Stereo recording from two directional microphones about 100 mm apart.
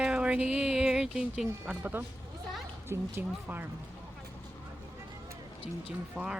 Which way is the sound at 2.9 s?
20° right (ahead or behind).